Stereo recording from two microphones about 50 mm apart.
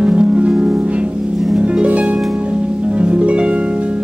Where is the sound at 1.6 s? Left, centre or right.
Right.